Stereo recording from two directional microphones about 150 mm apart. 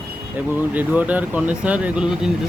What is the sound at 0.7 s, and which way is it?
Speech, 10° right (ahead or behind).